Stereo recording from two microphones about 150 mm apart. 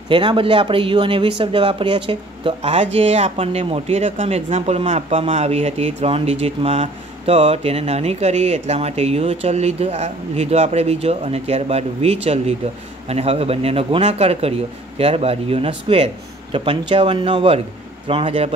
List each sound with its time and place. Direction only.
0.1 s speech: 35° right (ahead or behind)